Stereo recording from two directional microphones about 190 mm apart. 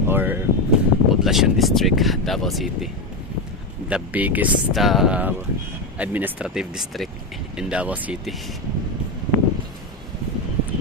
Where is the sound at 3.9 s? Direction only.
5° right (ahead or behind).